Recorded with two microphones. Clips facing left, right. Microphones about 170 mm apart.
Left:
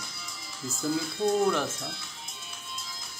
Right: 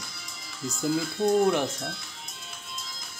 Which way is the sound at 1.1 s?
15° right (ahead or behind).